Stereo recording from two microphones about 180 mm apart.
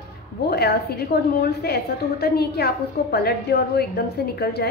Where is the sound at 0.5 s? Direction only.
60° left (ahead or behind).